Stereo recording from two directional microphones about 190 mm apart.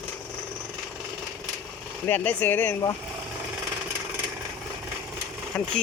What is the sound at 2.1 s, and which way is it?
Speech, 10° left (ahead or behind).